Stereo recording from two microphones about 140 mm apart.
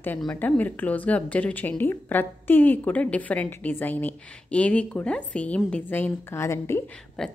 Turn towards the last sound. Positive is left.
turn(degrees=5)  # may be behind; listen again after turning